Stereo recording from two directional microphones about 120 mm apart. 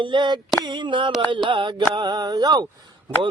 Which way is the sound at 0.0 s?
40° right (ahead or behind).